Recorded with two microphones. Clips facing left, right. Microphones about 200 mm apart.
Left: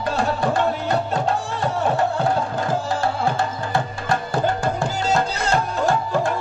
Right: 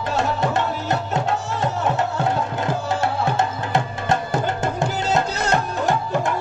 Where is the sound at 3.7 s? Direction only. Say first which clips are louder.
Right 2 dB; 20° right (ahead or behind).